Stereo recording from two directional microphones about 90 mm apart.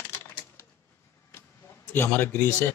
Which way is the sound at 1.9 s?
25° left (ahead or behind).